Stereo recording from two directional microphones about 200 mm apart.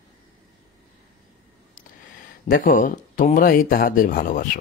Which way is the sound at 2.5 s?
45° left (ahead or behind).